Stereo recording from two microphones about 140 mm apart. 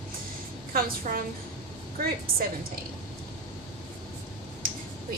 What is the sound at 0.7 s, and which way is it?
A woman's voice, 90° right.